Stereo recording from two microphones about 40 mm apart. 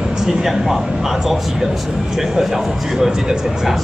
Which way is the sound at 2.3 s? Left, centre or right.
Centre.